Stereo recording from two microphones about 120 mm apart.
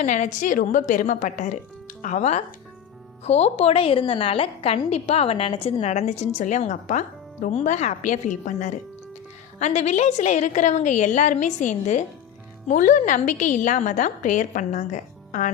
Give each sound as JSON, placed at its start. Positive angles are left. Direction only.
{"t": 0.0, "sound": "a woman's voice", "side_deg": 90}
{"t": 3.2, "sound": "a woman's voice", "side_deg": 65}
{"t": 5.9, "sound": "speech", "side_deg": 70}
{"t": 9.6, "sound": "a woman's voice", "side_deg": 70}
{"t": 12.6, "sound": "a woman's voice", "side_deg": 90}